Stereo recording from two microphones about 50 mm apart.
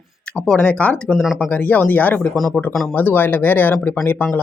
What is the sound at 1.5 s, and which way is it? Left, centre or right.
Speech, left.